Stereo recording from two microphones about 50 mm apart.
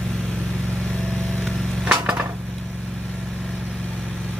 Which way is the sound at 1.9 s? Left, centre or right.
Right.